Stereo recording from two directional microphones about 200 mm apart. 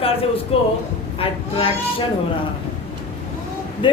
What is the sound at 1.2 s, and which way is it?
Speech, 25° left (ahead or behind).